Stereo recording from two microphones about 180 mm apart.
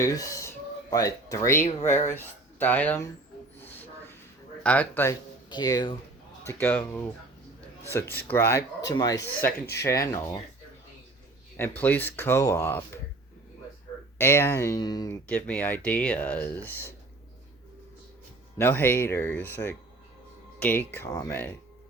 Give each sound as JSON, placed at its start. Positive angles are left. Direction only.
{"t": 0.1, "sound": "speech", "side_deg": 20}
{"t": 3.6, "sound": "a sound", "side_deg": 10}
{"t": 4.6, "sound": "speech", "side_deg": 10}
{"t": 5.5, "sound": "speech", "side_deg": 20}
{"t": 6.4, "sound": "speech", "side_deg": 15}
{"t": 8.1, "sound": "speech", "side_deg": 10}
{"t": 11.8, "sound": "speech", "side_deg": 10}
{"t": 14.2, "sound": "speech", "side_deg": 15}
{"t": 15.3, "sound": "speech", "side_deg": 5}
{"t": 18.5, "sound": "speech", "side_deg": 10}